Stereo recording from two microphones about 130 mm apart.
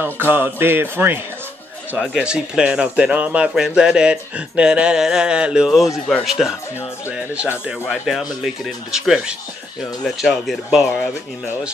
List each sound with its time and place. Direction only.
0.0 s speech: 15° right (ahead or behind)